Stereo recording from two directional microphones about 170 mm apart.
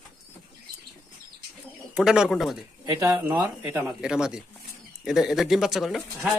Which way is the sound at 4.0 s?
5° right (ahead or behind).